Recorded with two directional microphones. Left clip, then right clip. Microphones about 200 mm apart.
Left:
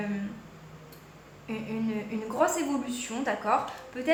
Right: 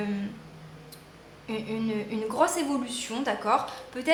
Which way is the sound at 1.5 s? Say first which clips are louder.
Right 3 dB; 25° right (ahead or behind).